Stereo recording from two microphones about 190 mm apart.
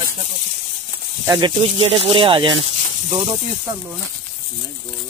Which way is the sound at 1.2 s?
20° right (ahead or behind).